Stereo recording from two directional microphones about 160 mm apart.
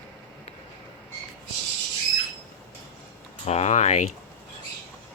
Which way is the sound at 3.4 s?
45° left (ahead or behind).